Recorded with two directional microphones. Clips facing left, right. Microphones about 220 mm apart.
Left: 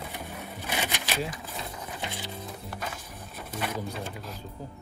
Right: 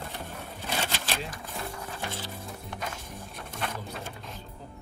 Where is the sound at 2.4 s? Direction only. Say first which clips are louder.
Even; centre (ahead or behind).